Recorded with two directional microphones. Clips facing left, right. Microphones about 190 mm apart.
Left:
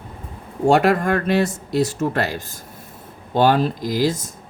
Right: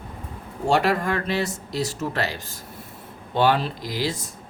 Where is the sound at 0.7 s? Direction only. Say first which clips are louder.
Left 5 dB; 50° left (ahead or behind).